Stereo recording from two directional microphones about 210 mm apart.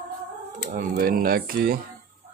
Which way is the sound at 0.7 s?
45° right (ahead or behind).